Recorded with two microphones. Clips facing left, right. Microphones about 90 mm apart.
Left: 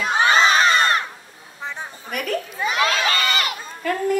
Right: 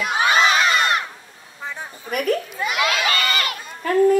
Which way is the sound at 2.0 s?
40° right (ahead or behind).